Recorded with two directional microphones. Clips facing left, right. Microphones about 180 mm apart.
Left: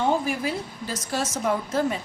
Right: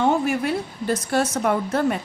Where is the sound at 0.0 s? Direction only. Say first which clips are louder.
Right 4 dB; 65° right (ahead or behind).